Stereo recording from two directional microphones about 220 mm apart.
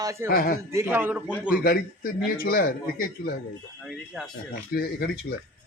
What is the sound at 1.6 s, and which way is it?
A man's voice, 40° left (ahead or behind).